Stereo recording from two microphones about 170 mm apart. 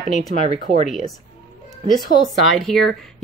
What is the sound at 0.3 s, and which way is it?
Speech, 45° right (ahead or behind).